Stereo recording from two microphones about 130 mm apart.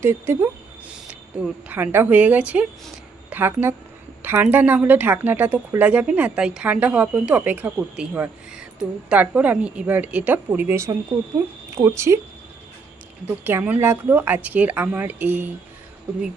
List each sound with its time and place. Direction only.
0.0 s a woman's voice: 20° right (ahead or behind)
4.2 s a sound: 20° right (ahead or behind)
4.4 s speech: 15° right (ahead or behind)
11.9 s speech: 20° right (ahead or behind)
13.4 s speech: 15° right (ahead or behind)